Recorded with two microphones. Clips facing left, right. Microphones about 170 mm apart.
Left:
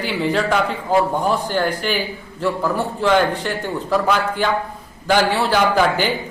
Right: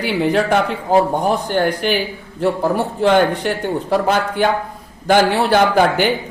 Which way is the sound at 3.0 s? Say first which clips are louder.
Right 3 dB; 60° right (ahead or behind).